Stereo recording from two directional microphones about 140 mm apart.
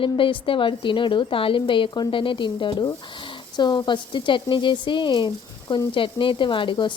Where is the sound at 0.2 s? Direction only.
40° left (ahead or behind).